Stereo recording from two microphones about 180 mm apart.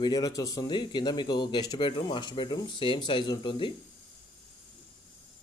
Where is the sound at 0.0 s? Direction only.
20° left (ahead or behind).